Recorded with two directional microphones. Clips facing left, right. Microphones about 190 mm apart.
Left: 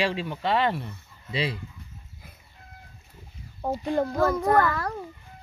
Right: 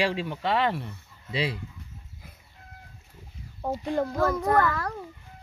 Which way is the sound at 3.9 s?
35° left (ahead or behind).